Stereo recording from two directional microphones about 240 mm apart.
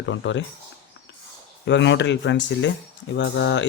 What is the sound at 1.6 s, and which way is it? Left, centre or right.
Speech, left.